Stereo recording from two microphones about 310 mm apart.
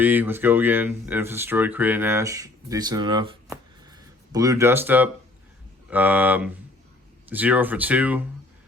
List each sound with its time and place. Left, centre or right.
0.0 s speech: centre